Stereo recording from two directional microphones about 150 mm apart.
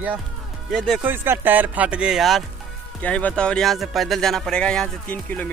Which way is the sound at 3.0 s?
10° left (ahead or behind).